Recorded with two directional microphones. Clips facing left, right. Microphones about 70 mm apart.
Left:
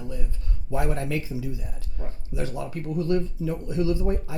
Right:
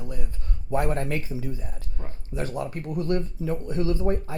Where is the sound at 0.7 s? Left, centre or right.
Right.